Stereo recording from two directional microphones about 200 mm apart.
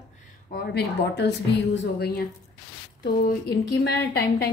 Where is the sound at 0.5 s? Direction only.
55° left (ahead or behind).